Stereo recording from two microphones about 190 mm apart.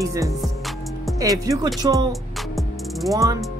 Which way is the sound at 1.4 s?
20° right (ahead or behind).